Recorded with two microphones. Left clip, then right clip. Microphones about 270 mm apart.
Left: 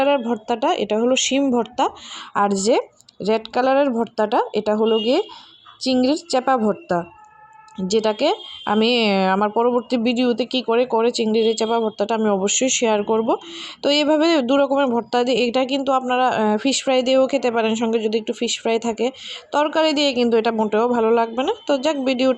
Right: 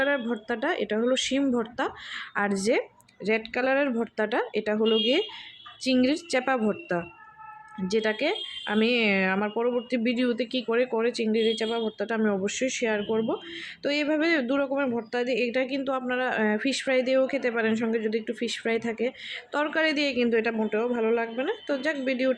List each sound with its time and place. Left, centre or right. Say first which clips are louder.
0.0 s speech: left 8 dB; centre
5.8 s speech: left 6 dB; centre